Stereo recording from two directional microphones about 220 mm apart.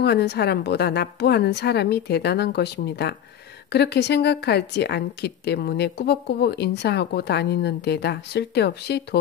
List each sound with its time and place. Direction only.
0.0 s a woman's voice: 50° left (ahead or behind)